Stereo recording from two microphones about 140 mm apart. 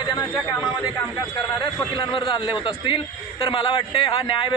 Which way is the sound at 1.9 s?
35° left (ahead or behind).